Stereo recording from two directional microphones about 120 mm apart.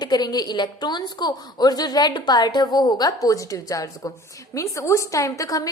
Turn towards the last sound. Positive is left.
turn(degrees=30)  # may be behind; listen again after turning